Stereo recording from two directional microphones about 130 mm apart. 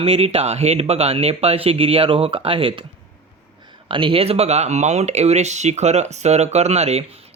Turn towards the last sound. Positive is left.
turn(degrees=-55)  # may be behind; listen again after turning